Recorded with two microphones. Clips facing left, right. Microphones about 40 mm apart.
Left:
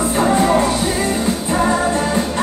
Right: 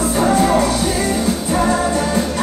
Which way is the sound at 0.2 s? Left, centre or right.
Left.